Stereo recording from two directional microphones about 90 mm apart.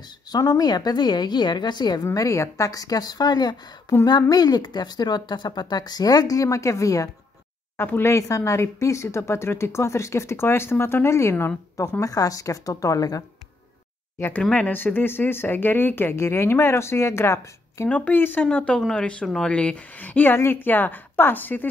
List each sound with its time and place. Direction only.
0.3 s speech: 45° left (ahead or behind)
2.1 s speech: 35° left (ahead or behind)
7.7 s speech: 25° left (ahead or behind)
14.5 s speech: 20° left (ahead or behind)
17.8 s a woman's voice: 20° left (ahead or behind)